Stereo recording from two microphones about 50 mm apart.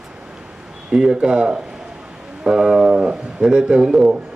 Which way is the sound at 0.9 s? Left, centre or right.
Centre.